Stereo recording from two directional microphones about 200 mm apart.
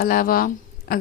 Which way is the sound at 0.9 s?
50° left (ahead or behind).